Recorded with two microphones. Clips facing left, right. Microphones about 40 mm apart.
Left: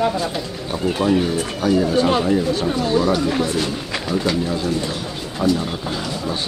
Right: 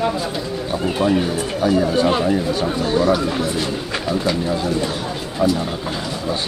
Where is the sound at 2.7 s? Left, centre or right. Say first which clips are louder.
Left 1 dB; centre.